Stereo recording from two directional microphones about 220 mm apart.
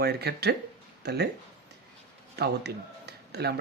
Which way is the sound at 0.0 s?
45° right (ahead or behind).